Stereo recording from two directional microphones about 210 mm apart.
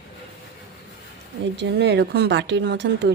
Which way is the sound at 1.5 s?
55° right (ahead or behind).